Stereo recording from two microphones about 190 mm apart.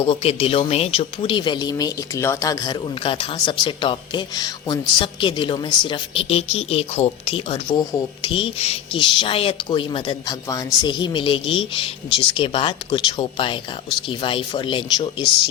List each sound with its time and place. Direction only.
0.0 s speech: 30° left (ahead or behind)